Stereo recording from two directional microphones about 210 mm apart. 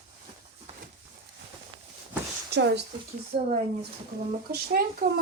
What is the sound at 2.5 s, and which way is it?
Speech, 55° right (ahead or behind).